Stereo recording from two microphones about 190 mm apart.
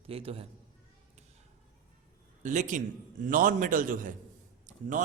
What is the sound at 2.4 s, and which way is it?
A man's voice, 40° right (ahead or behind).